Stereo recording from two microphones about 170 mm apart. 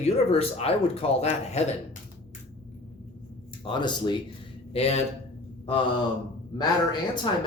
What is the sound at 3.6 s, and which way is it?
Speech, 25° left (ahead or behind).